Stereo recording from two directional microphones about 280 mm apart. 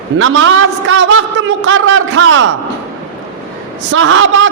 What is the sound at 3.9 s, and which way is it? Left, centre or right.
Speech, right.